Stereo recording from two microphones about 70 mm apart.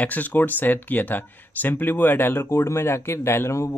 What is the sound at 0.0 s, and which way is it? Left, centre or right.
Speech, left.